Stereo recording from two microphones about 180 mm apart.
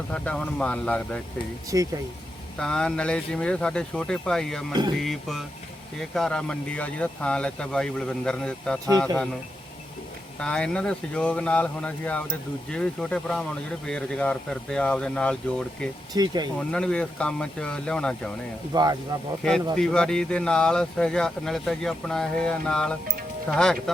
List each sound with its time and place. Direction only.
0.1 s speech: 5° left (ahead or behind)
1.7 s speech: 20° right (ahead or behind)
2.6 s speech: 5° left (ahead or behind)
4.7 s speech: 25° right (ahead or behind)
5.0 s speech: centre (ahead or behind)
10.4 s speech: 5° left (ahead or behind)
16.1 s speech: 20° right (ahead or behind)
16.6 s speech: 5° left (ahead or behind)
18.7 s speech: 20° right (ahead or behind)
19.7 s speech: 5° left (ahead or behind)